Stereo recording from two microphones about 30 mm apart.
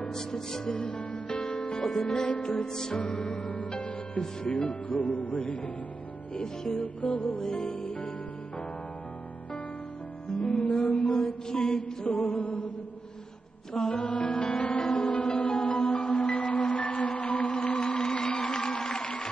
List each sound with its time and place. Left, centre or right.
0.1 s music: centre
0.7 s music: left
2.2 s mantra: left
2.6 s music: centre
3.0 s mantra: left
3.4 s music: left
6.7 s music: left
10.6 s music: left
11.5 s mantra: left
12.1 s music: left
13.9 s music: left
17.7 s music: left
18.5 s music: left
19.0 s music: left